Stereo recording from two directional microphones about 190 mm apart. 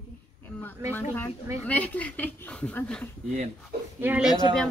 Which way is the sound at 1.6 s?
5° left (ahead or behind).